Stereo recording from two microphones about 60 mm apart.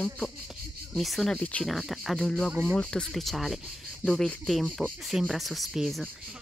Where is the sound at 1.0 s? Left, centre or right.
Centre.